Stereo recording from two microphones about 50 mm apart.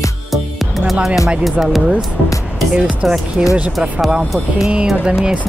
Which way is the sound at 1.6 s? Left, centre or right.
Centre.